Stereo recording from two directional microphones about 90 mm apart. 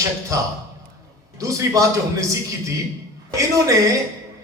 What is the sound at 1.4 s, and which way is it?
Speech, 35° right (ahead or behind).